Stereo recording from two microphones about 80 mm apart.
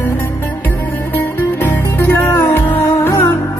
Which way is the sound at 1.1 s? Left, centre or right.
Left.